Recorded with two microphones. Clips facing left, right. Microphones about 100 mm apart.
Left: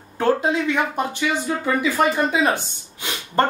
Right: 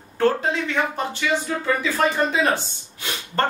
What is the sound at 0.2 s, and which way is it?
Speech, 15° left (ahead or behind).